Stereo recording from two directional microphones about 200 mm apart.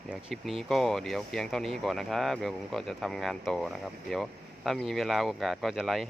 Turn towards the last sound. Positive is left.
turn(degrees=0)  # may be behind; listen again after turning